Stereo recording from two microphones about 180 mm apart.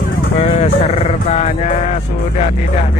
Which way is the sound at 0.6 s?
35° left (ahead or behind).